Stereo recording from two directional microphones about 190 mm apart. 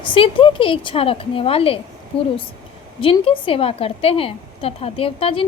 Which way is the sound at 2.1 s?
5° left (ahead or behind).